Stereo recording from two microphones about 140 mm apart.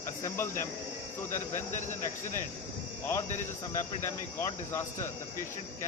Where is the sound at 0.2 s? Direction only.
20° left (ahead or behind).